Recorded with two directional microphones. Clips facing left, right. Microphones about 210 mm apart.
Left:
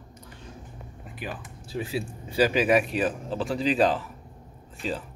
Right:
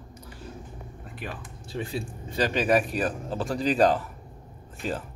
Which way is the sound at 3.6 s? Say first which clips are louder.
Right 1 dB; 45° right (ahead or behind).